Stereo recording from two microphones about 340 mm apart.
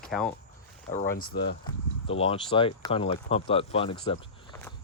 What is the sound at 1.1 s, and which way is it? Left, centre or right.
Speech, left.